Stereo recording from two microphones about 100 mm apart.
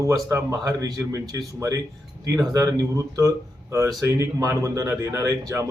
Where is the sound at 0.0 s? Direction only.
30° right (ahead or behind).